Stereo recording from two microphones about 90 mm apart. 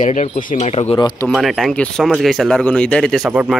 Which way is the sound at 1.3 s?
5° right (ahead or behind).